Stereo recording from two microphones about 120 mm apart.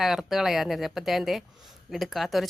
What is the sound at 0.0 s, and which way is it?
Speech, 5° right (ahead or behind).